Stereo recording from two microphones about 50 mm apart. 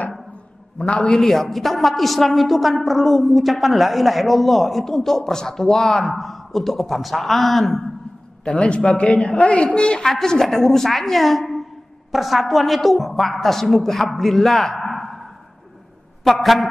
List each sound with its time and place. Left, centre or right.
0.7 s a woman's voice: centre
8.5 s a man's voice: left; by 15.2 s centre
16.3 s a woman's voice: centre